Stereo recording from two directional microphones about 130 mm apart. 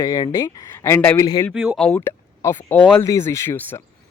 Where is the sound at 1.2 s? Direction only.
30° left (ahead or behind).